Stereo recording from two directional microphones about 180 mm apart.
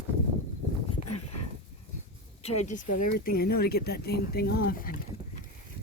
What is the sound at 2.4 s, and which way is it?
Speech, 35° left (ahead or behind).